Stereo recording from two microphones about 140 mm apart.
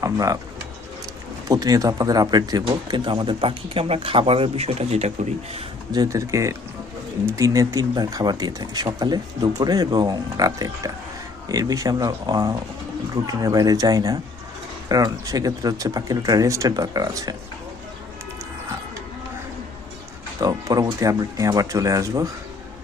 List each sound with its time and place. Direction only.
0.0 s speech: 25° right (ahead or behind)
1.5 s speech: 25° right (ahead or behind); by 5.6 s 50° right (ahead or behind)
5.9 s speech: 25° right (ahead or behind)
20.4 s speech: 25° right (ahead or behind)